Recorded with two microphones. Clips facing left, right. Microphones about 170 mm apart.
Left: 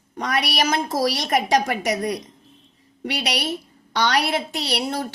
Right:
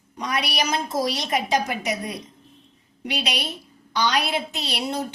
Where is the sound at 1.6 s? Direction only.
70° left (ahead or behind).